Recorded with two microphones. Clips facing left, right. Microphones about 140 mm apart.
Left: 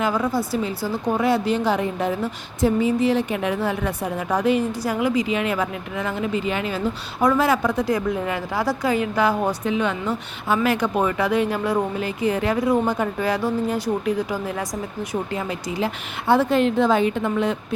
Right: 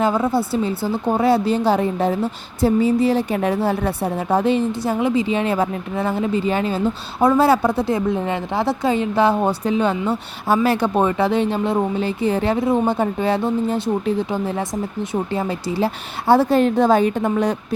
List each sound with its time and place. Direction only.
0.0 s a woman's voice: 25° right (ahead or behind)